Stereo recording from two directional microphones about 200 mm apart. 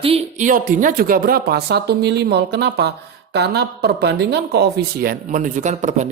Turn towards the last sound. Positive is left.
turn(degrees=-35)  # may be behind; listen again after turning